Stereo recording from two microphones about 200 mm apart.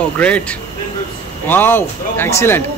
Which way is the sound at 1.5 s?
10° left (ahead or behind).